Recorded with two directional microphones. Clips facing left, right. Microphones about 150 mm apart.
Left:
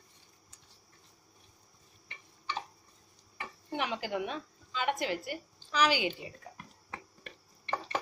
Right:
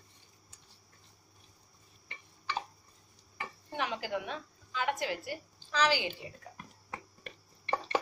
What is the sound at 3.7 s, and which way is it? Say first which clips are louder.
A woman's voice: left 1 dB; 20° left (ahead or behind).